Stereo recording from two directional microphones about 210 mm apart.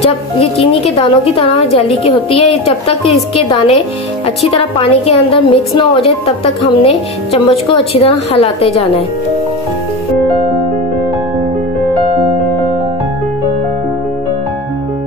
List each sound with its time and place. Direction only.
0.6 s a woman's voice: 30° left (ahead or behind)
2.6 s a woman's voice: 25° left (ahead or behind)